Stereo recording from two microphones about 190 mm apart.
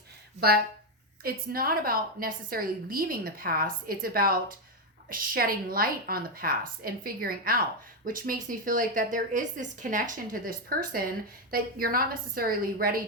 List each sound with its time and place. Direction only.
0.3 s a woman's voice: 55° right (ahead or behind)